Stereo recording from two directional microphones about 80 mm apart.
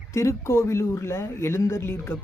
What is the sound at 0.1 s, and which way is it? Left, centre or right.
Speech, left.